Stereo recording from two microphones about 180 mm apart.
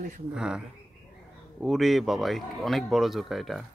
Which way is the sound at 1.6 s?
Centre (ahead or behind).